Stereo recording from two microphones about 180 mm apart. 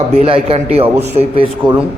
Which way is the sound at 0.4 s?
35° right (ahead or behind).